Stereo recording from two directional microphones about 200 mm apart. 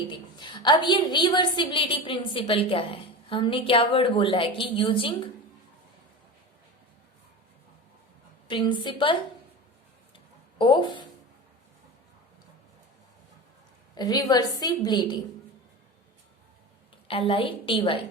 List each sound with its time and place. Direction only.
0.1 s a woman's voice: 20° left (ahead or behind)
8.4 s a woman's voice: 25° left (ahead or behind)
10.6 s a woman's voice: 25° left (ahead or behind)
13.9 s a woman's voice: 20° left (ahead or behind)
17.1 s a woman's voice: 25° left (ahead or behind)